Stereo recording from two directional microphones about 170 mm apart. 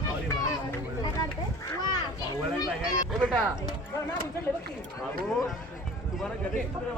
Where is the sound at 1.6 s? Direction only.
20° left (ahead or behind).